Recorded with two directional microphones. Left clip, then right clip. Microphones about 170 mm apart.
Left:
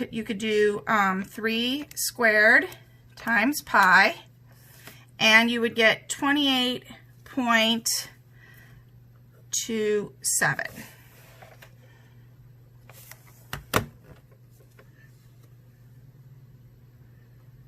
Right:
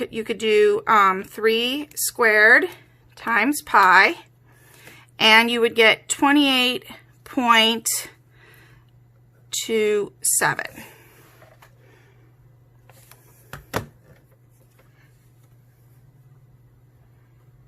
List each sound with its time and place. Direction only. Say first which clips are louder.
0.0 s a woman's voice: right 7 dB; 30° right (ahead or behind)